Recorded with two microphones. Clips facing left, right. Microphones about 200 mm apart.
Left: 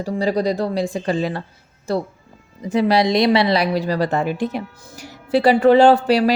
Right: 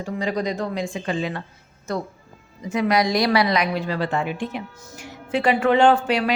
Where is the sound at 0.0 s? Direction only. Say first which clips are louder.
Left 5 dB; 35° left (ahead or behind).